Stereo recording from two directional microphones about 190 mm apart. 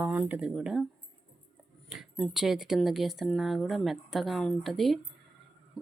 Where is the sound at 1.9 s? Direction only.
Centre (ahead or behind).